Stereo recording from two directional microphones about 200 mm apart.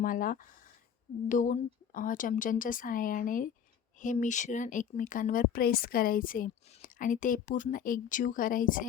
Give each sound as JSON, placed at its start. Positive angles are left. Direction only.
{"t": 0.0, "sound": "speech", "side_deg": 45}